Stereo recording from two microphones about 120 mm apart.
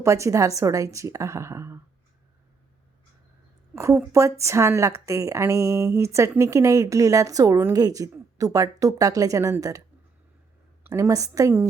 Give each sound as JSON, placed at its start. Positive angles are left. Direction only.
{"t": 0.0, "sound": "a woman's voice", "side_deg": -25}
{"t": 3.8, "sound": "a woman's voice", "side_deg": -25}
{"t": 10.8, "sound": "a woman's voice", "side_deg": -25}